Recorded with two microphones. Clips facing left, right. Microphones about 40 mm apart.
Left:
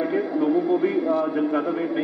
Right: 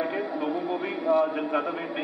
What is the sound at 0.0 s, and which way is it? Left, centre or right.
A man's voice, centre.